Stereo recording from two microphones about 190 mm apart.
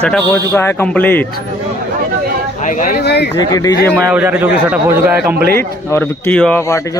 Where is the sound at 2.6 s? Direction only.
40° left (ahead or behind).